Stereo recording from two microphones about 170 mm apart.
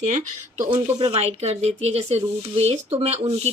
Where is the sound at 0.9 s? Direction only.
35° right (ahead or behind).